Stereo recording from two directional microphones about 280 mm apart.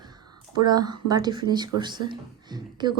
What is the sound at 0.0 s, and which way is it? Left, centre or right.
Speech, centre.